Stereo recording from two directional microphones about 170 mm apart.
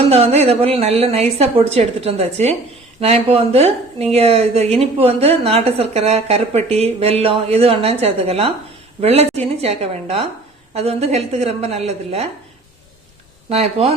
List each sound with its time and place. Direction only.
0.0 s a woman's voice: 35° right (ahead or behind)
13.5 s a woman's voice: 35° right (ahead or behind)